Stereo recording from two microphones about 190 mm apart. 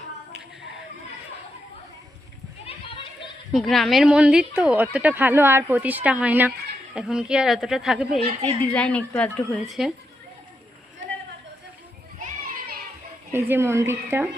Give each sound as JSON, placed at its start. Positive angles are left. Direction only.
{"t": 2.6, "sound": "children playing", "side_deg": 30}
{"t": 3.5, "sound": "a woman's voice", "side_deg": 0}
{"t": 9.6, "sound": "a woman's voice", "side_deg": 0}
{"t": 13.3, "sound": "speech", "side_deg": -10}